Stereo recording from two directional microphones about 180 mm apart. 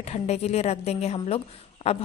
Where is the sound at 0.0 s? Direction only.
35° left (ahead or behind).